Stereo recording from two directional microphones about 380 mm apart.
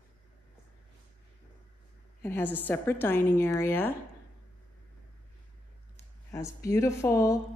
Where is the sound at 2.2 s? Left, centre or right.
Centre.